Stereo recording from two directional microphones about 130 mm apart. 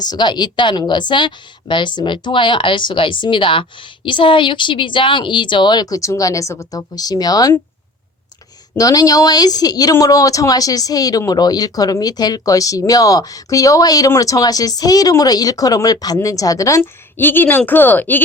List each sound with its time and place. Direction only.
0.0 s a woman's voice: 35° left (ahead or behind)
8.7 s speech: 25° left (ahead or behind)